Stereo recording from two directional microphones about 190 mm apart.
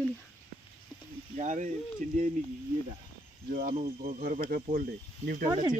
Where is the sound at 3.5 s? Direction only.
50° right (ahead or behind).